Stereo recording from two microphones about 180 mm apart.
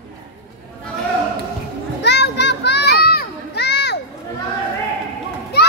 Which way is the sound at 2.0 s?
70° left (ahead or behind).